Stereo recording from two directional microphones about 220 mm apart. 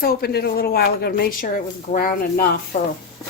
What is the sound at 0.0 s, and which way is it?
A woman's voice, 45° left (ahead or behind).